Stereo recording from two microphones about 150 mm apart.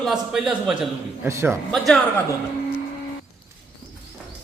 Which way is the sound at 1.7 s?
Centre (ahead or behind).